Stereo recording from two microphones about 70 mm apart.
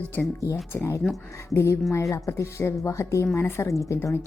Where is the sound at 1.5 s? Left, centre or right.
Left.